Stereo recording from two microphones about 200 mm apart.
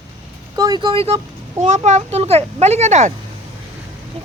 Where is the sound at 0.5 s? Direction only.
20° right (ahead or behind); by 3.1 s 35° right (ahead or behind).